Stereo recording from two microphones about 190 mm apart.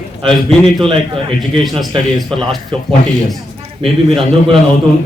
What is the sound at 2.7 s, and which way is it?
Speech, 25° right (ahead or behind).